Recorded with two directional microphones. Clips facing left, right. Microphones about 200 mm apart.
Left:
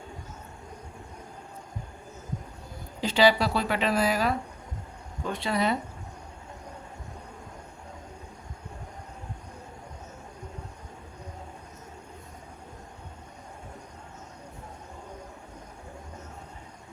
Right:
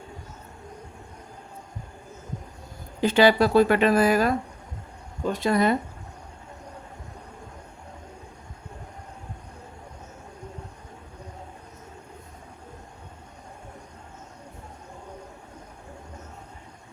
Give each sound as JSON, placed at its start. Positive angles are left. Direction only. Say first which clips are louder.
{"t": 3.0, "sound": "a woman's voice", "louder": "right 4 dB", "side_deg": -55}